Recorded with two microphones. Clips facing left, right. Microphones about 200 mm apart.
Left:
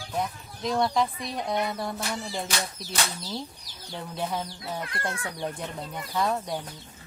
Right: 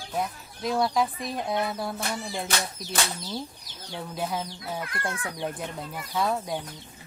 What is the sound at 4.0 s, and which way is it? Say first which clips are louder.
Speech: even; 5° right (ahead or behind).